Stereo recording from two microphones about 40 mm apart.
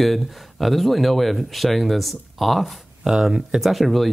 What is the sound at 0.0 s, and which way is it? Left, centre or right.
Speech, centre.